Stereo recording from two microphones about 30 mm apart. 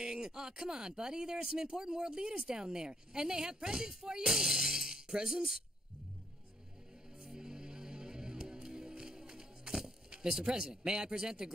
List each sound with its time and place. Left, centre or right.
0.0 s speech: right
7.2 s music: right
10.4 s speech: right